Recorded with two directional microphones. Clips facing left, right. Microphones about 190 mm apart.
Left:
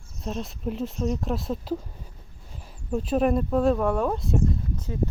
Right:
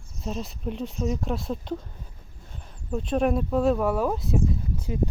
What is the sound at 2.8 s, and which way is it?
Speech, 5° left (ahead or behind).